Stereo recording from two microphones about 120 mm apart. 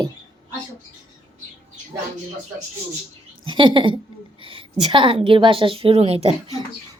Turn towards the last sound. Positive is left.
turn(degrees=-55)  # may be behind; listen again after turning